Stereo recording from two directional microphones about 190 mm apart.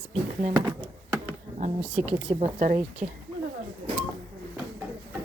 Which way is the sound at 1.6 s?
35° right (ahead or behind).